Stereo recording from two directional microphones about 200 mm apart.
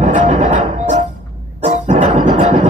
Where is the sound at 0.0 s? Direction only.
35° right (ahead or behind).